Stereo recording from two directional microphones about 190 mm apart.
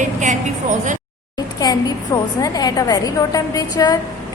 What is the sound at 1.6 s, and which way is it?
A woman's voice, 20° left (ahead or behind).